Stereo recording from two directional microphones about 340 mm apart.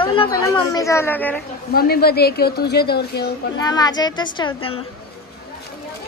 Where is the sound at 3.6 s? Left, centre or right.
Centre.